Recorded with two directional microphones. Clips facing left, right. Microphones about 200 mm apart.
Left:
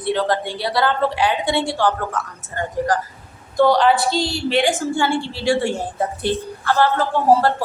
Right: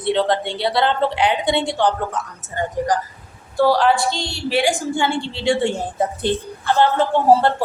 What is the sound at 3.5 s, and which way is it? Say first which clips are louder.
A woman's voice: left 1 dB; 5° right (ahead or behind).